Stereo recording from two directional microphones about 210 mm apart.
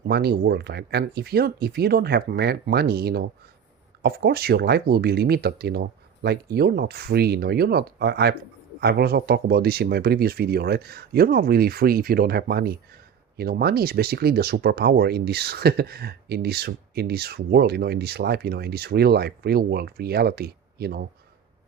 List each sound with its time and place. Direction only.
0.1 s speech: 50° right (ahead or behind)